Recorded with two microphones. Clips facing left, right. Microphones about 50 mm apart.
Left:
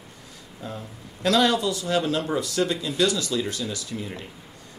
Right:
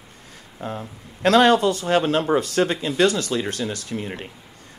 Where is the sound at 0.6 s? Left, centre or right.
Right.